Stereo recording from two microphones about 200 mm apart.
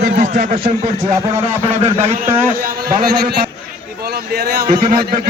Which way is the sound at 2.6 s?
45° right (ahead or behind).